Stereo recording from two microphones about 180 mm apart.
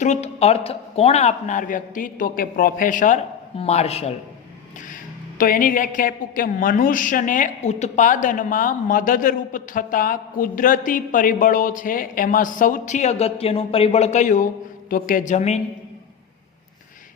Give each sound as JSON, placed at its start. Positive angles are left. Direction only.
{"t": 0.0, "sound": "a woman's voice", "side_deg": 40}
{"t": 3.6, "sound": "speech", "side_deg": 35}
{"t": 5.4, "sound": "a woman's voice", "side_deg": 50}